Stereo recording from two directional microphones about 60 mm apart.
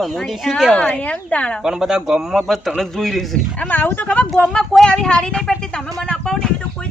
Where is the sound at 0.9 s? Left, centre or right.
Left.